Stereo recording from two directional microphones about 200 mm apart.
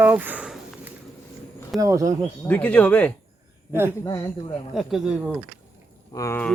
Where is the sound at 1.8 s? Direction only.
15° right (ahead or behind).